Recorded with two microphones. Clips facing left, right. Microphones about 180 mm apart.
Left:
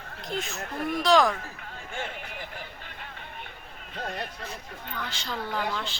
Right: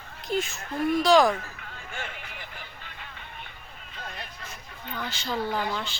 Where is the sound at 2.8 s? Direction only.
50° left (ahead or behind).